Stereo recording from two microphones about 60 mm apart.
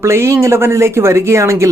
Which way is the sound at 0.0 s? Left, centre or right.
Right.